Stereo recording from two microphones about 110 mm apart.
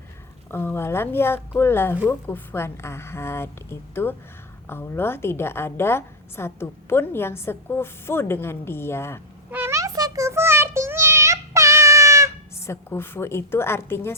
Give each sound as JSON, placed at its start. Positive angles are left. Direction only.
{"t": 0.5, "sound": "a woman's voice", "side_deg": 20}
{"t": 9.5, "sound": "child singing", "side_deg": -20}
{"t": 12.6, "sound": "a woman's voice", "side_deg": 25}